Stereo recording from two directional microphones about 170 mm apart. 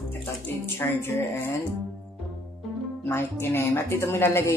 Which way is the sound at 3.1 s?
15° left (ahead or behind).